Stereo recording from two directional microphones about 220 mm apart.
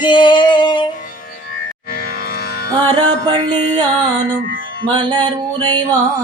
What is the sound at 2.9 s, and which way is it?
Music, 20° right (ahead or behind).